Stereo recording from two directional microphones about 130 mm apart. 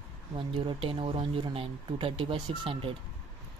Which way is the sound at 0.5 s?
45° right (ahead or behind).